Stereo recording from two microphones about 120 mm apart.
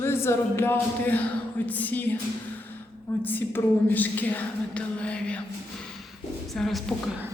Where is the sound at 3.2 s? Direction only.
15° left (ahead or behind).